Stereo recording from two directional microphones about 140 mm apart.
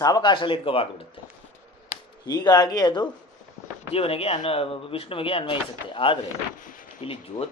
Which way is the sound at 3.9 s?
45° left (ahead or behind).